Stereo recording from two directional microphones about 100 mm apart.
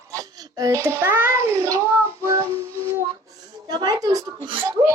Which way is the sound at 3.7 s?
40° right (ahead or behind).